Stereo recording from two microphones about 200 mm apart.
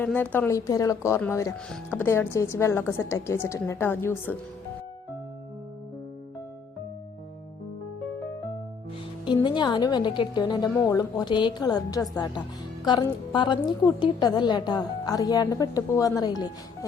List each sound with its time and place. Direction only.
0.0 s a woman's voice: 5° left (ahead or behind)
9.2 s a woman's voice: 20° left (ahead or behind)